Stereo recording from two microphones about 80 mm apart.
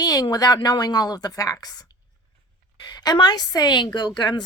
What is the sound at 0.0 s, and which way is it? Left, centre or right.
A woman's voice, left.